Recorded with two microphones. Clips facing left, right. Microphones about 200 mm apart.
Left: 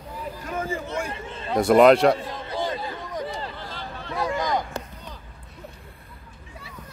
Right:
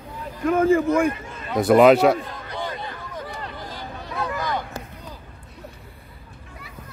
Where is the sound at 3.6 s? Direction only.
15° right (ahead or behind).